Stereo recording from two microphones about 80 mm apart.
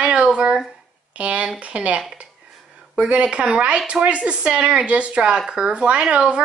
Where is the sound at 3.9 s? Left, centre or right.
Centre.